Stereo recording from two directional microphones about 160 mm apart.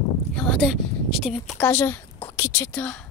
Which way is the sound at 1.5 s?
10° left (ahead or behind).